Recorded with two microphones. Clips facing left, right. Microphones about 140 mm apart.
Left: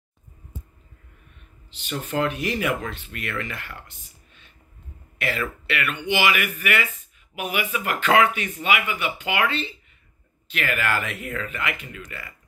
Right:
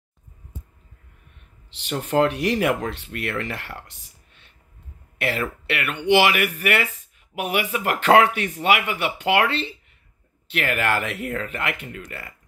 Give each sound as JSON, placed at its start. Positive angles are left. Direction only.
{"t": 1.7, "sound": "speech", "side_deg": -70}
{"t": 5.2, "sound": "speech", "side_deg": -60}